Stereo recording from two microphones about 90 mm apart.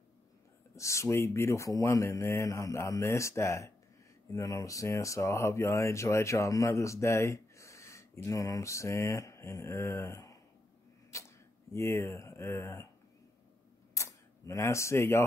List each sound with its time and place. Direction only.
0.7 s speech: 35° left (ahead or behind)
11.1 s a sound: 35° left (ahead or behind)
13.9 s camera: 35° left (ahead or behind)